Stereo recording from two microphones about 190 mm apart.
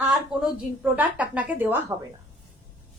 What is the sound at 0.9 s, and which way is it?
A woman's voice, 5° right (ahead or behind).